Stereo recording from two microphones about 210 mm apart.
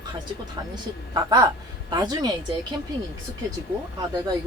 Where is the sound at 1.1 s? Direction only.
20° right (ahead or behind).